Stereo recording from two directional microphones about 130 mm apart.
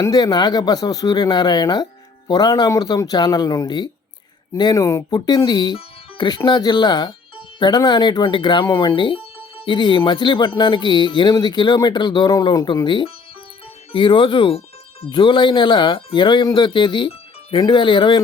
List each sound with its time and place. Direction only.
0.0 s speech: 30° left (ahead or behind)
9.0 s speech: 40° left (ahead or behind)